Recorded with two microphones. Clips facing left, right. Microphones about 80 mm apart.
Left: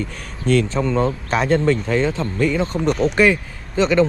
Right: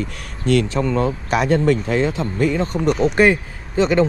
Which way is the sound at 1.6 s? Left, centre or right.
Right.